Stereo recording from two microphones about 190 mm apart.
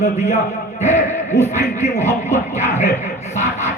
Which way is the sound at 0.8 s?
35° left (ahead or behind).